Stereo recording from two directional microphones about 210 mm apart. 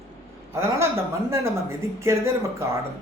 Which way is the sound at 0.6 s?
15° right (ahead or behind).